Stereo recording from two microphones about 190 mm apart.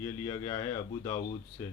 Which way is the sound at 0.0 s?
20° left (ahead or behind).